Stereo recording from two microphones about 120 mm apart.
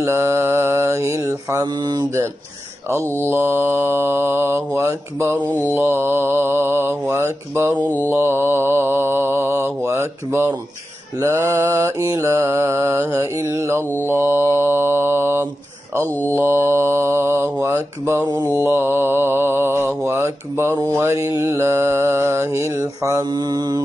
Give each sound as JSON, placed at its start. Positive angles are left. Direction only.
{"t": 0.0, "sound": "mantra", "side_deg": -25}
{"t": 1.8, "sound": "mantra", "side_deg": -35}
{"t": 3.2, "sound": "mantra", "side_deg": -20}
{"t": 18.2, "sound": "mantra", "side_deg": -35}
{"t": 18.6, "sound": "mantra", "side_deg": -20}
{"t": 23.3, "sound": "mantra", "side_deg": -35}